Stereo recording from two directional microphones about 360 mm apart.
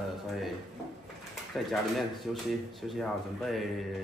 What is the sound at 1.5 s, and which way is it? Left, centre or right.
Speech, centre.